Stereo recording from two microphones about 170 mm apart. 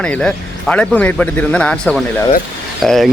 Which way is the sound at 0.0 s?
5° left (ahead or behind).